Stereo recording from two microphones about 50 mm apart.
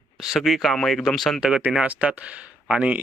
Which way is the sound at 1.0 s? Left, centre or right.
Centre.